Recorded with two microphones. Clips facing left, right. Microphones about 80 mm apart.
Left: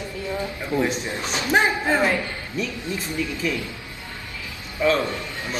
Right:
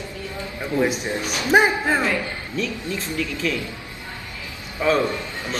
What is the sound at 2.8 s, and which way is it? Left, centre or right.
Speech, left.